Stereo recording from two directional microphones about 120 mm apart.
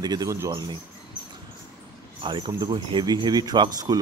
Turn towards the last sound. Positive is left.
turn(degrees=-35)  # may be behind; listen again after turning